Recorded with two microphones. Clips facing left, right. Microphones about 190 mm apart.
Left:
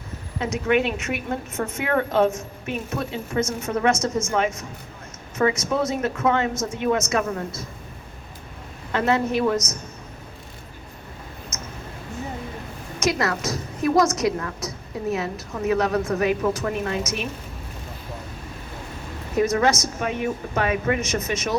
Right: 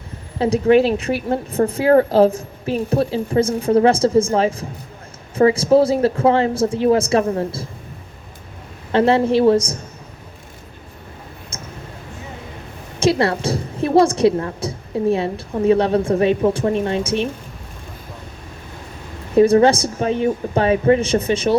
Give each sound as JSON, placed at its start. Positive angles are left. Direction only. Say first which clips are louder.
{"t": 0.3, "sound": "a woman's voice", "louder": "right 8 dB", "side_deg": -35}
{"t": 8.9, "sound": "a woman's voice", "louder": "right 7 dB", "side_deg": -30}
{"t": 11.5, "sound": "a sound", "louder": "right 3 dB", "side_deg": -30}
{"t": 13.0, "sound": "a woman's voice", "louder": "right 7 dB", "side_deg": -30}
{"t": 19.4, "sound": "a woman's voice", "louder": "right 8 dB", "side_deg": -30}